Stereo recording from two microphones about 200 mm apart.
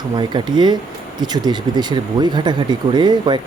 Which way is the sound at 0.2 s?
20° right (ahead or behind).